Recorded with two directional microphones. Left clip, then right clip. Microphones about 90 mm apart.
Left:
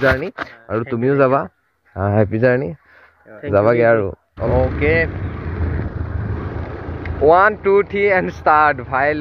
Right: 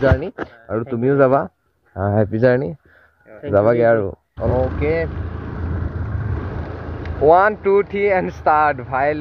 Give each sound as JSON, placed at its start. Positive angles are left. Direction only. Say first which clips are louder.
{"t": 0.7, "sound": "speech", "louder": "left 1 dB", "side_deg": 10}
{"t": 1.0, "sound": "speech", "louder": "right 1 dB", "side_deg": -5}
{"t": 4.7, "sound": "speech", "louder": "left 4 dB", "side_deg": -20}
{"t": 7.2, "sound": "speech", "louder": "left 1 dB", "side_deg": -15}